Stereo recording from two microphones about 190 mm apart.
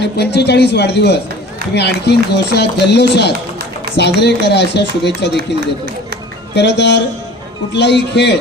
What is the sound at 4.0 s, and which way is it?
A man's voice, 65° left (ahead or behind).